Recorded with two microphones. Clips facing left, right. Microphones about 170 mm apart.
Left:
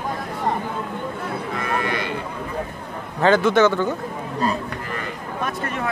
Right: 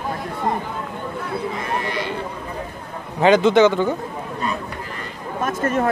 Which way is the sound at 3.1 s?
15° right (ahead or behind).